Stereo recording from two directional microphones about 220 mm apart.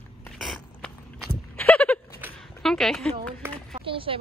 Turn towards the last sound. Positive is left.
turn(degrees=-25)  # may be behind; listen again after turning